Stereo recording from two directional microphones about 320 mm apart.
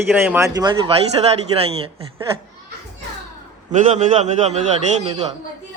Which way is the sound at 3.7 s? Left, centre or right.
Right.